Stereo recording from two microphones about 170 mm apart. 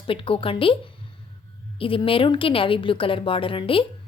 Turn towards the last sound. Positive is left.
turn(degrees=30)  # may be behind; listen again after turning